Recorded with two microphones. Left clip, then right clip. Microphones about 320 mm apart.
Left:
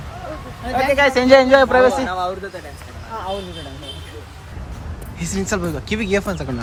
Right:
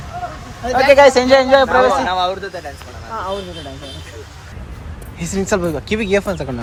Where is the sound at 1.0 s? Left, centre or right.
Centre.